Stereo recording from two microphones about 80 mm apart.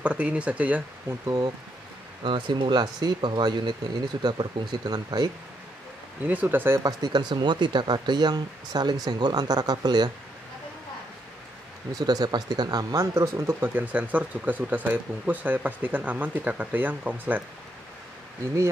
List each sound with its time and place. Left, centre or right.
0.0 s speech: centre
2.2 s speech: right
6.2 s speech: right
6.8 s speech: right
12.0 s speech: right
13.7 s speech: right